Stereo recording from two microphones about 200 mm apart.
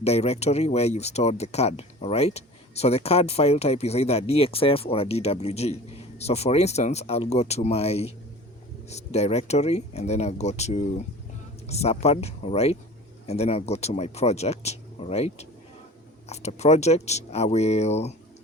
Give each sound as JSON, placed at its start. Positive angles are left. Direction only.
{"t": 0.0, "sound": "speech", "side_deg": 30}